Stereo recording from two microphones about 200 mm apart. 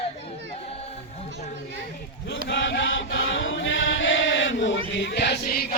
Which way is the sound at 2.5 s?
65° left (ahead or behind).